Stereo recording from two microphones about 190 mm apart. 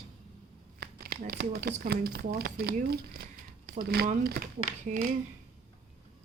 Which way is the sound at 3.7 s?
55° right (ahead or behind).